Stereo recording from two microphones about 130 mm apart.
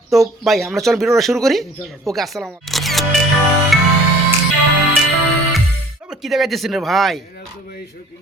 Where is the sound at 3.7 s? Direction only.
Centre (ahead or behind).